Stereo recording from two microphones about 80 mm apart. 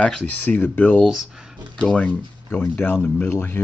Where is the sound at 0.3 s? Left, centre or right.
Left.